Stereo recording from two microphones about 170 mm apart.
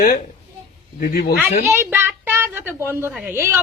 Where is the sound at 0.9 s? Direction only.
60° left (ahead or behind).